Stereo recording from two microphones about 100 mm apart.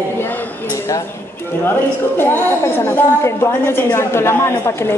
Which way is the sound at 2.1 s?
20° left (ahead or behind).